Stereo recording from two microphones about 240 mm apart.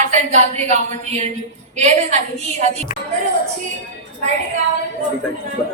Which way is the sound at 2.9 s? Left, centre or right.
Left.